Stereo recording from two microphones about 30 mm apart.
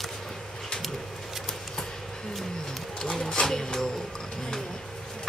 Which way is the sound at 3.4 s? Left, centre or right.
Centre.